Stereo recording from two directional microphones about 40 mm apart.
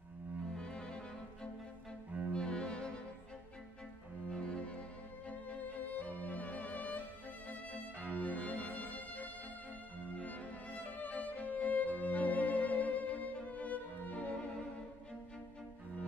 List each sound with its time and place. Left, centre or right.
0.6 s music: left
2.3 s cello: left
4.3 s music: left
8.1 s cello: left
10.1 s music: left